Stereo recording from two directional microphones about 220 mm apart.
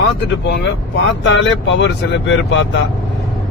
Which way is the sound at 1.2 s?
55° left (ahead or behind).